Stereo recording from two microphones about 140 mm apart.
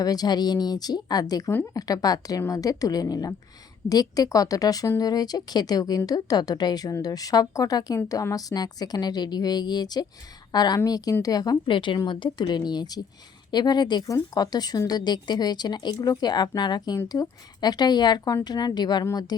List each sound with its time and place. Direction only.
0.0 s a woman's voice: 30° left (ahead or behind)